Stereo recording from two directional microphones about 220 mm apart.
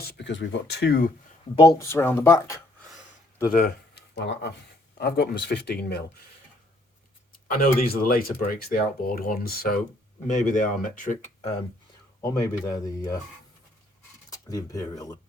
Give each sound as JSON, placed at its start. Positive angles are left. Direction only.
{"t": 0.1, "sound": "speech", "side_deg": 50}
{"t": 1.9, "sound": "speech", "side_deg": 10}
{"t": 3.5, "sound": "speech", "side_deg": 45}
{"t": 7.3, "sound": "speech", "side_deg": 40}
{"t": 12.2, "sound": "speech", "side_deg": 15}
{"t": 14.3, "sound": "speech", "side_deg": 15}